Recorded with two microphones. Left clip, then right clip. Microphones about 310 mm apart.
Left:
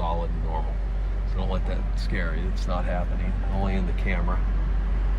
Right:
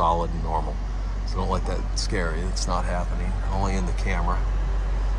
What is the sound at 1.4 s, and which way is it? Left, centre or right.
Speech, right.